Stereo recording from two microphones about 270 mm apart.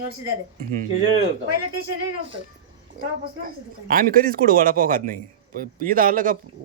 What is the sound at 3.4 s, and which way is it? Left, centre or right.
Speech, right.